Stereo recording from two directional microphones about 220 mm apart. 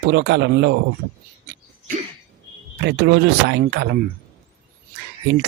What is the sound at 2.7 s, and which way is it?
Speech, 50° right (ahead or behind).